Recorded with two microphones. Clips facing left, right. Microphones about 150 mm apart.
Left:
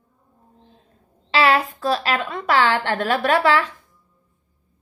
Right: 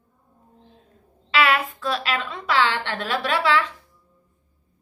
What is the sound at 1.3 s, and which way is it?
A woman's voice, 35° left (ahead or behind).